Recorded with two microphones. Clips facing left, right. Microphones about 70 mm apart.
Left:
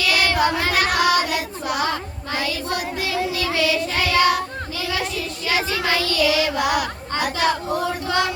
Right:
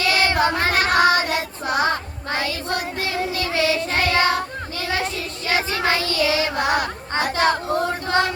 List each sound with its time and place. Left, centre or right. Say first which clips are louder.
0.0 s child singing: even; right
4.8 s a sound: right 1 dB; right
5.5 s child singing: right 1 dB; right